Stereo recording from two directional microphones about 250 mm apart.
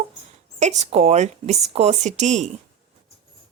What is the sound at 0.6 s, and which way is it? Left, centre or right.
Speech, right.